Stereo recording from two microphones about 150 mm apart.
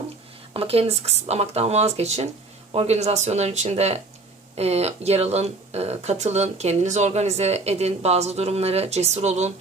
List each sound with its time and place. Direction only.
0.5 s speech: 40° right (ahead or behind)